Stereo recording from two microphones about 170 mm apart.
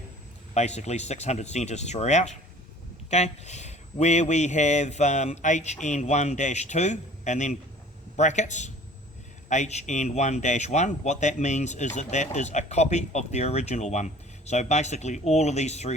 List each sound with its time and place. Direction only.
0.5 s speech: 40° left (ahead or behind)